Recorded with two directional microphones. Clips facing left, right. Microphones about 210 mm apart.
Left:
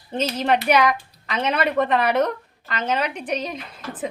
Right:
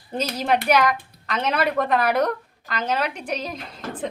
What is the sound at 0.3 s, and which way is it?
Speech, 10° right (ahead or behind).